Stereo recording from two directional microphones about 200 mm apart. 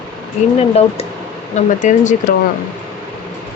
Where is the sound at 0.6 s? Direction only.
30° left (ahead or behind).